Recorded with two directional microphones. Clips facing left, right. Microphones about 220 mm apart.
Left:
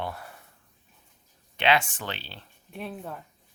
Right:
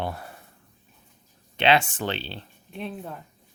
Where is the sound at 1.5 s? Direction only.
30° right (ahead or behind).